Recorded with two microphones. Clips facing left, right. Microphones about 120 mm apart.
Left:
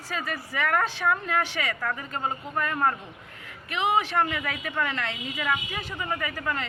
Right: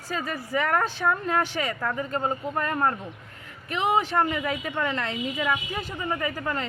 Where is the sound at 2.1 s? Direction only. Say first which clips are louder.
Right 3 dB; 35° right (ahead or behind).